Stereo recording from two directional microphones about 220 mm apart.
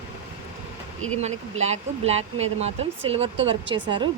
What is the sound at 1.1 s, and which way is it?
A woman's voice, 30° right (ahead or behind).